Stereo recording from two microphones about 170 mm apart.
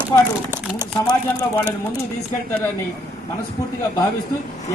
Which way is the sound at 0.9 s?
25° left (ahead or behind).